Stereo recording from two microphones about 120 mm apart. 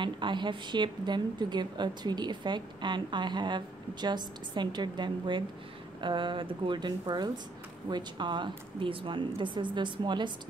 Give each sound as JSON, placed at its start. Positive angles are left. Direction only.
{"t": 0.0, "sound": "a woman's voice", "side_deg": -40}